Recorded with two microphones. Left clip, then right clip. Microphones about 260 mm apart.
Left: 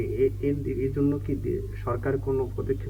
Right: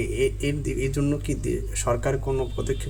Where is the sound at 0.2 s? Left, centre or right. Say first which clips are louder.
Left 1 dB; right.